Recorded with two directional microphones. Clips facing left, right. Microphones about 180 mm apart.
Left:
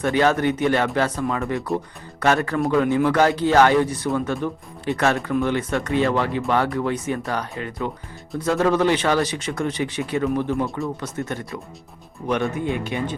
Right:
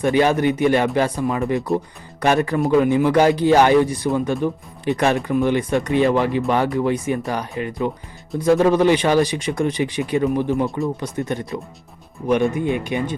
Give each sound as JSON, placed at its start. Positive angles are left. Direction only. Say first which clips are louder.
{"t": 0.0, "sound": "speech", "louder": "right 2 dB", "side_deg": -15}